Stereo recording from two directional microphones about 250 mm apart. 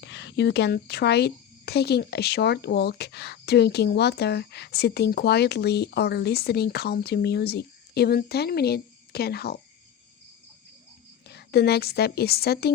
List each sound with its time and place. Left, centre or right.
0.0 s speech: left
11.3 s speech: left